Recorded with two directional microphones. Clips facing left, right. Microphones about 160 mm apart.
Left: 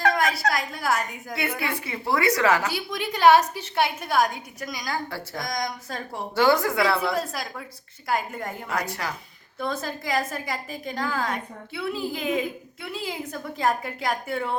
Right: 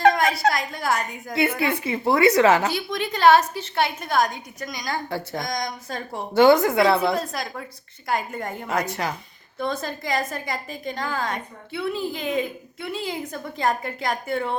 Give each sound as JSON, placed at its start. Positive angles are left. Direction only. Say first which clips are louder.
{"t": 0.5, "sound": "a woman's voice", "louder": "right 1 dB", "side_deg": 5}
{"t": 1.4, "sound": "a woman's voice", "louder": "right 7 dB", "side_deg": -25}
{"t": 2.7, "sound": "a woman's voice", "louder": "right 2 dB", "side_deg": 10}
{"t": 5.0, "sound": "a woman's voice", "louder": "right 4 dB", "side_deg": -20}
{"t": 5.5, "sound": "a woman's voice", "louder": "right 1 dB", "side_deg": 0}
{"t": 6.3, "sound": "a woman's voice", "louder": "right 5 dB", "side_deg": -20}
{"t": 8.0, "sound": "a woman's voice", "louder": "right 1 dB", "side_deg": 5}
{"t": 8.6, "sound": "a woman's voice", "louder": "right 5 dB", "side_deg": -20}
{"t": 9.6, "sound": "a woman's voice", "louder": "right 2 dB", "side_deg": 5}